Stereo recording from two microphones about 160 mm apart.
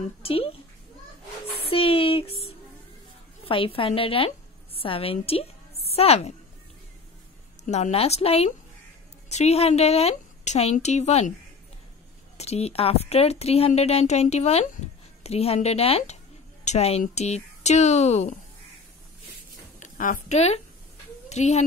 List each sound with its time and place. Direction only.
0.2 s a woman's voice: 35° left (ahead or behind)
1.6 s a sound: 35° left (ahead or behind)
3.4 s a woman's voice: 35° left (ahead or behind)
7.6 s a woman's voice: 45° left (ahead or behind)
12.4 s a woman's voice: 40° left (ahead or behind)
19.8 s speech: 50° left (ahead or behind)